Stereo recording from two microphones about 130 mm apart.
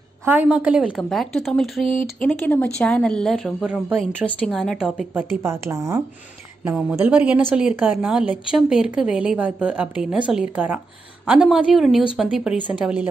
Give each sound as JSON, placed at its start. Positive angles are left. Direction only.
{"t": 0.2, "sound": "a woman's voice", "side_deg": -15}
{"t": 1.0, "sound": "speech", "side_deg": 5}
{"t": 2.0, "sound": "speech", "side_deg": 15}
{"t": 4.3, "sound": "a woman's voice", "side_deg": 10}
{"t": 4.6, "sound": "speech", "side_deg": 0}
{"t": 5.4, "sound": "a woman's voice", "side_deg": -20}
{"t": 6.6, "sound": "a woman's voice", "side_deg": -10}